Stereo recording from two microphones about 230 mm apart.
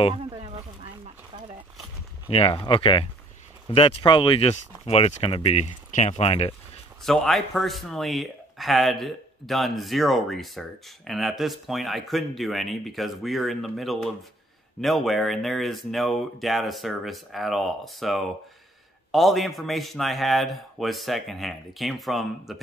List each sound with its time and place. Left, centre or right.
2.2 s speech: left
7.0 s speech: centre